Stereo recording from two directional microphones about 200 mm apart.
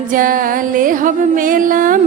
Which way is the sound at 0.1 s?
45° right (ahead or behind).